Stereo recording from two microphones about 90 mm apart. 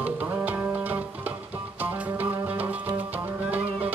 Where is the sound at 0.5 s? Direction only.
15° right (ahead or behind).